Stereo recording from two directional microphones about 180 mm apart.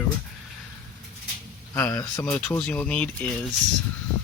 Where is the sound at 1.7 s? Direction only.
15° left (ahead or behind).